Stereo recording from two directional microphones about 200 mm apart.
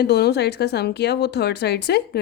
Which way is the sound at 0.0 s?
55° left (ahead or behind).